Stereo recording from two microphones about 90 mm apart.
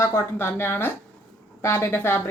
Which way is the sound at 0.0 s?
30° left (ahead or behind).